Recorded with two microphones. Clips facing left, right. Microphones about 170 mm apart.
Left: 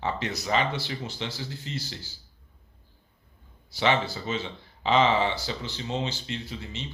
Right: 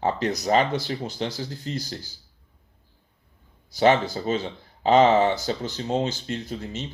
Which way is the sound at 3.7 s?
45° right (ahead or behind).